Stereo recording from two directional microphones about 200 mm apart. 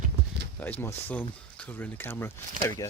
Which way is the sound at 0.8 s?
10° left (ahead or behind).